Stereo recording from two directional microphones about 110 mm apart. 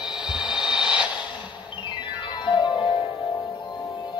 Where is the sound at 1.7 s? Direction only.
45° left (ahead or behind).